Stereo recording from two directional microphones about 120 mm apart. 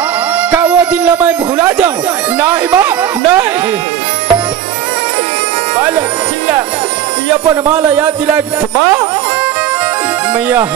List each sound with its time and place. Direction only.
0.4 s music: 10° right (ahead or behind)
1.2 s speech: 15° right (ahead or behind)
7.6 s speech: 20° right (ahead or behind)